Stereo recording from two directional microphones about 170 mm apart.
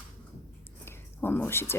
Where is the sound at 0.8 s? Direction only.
15° left (ahead or behind).